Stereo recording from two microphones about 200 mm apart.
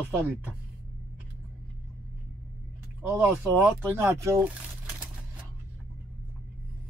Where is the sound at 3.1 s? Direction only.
10° right (ahead or behind).